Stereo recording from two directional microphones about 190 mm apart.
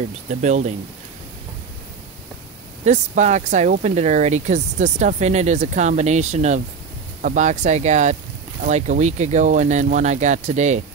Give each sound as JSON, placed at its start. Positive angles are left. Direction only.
{"t": 0.4, "sound": "speech", "side_deg": -40}
{"t": 2.8, "sound": "speech", "side_deg": -40}